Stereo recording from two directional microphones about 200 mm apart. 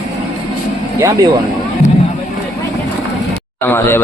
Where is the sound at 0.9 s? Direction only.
15° right (ahead or behind).